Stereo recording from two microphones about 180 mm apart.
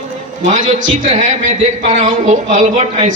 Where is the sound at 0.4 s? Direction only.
45° right (ahead or behind).